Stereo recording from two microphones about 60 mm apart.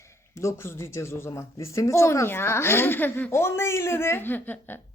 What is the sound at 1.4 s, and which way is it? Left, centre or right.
Speech, left.